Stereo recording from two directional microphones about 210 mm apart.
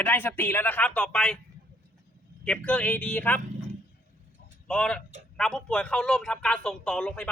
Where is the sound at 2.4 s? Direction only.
5° left (ahead or behind).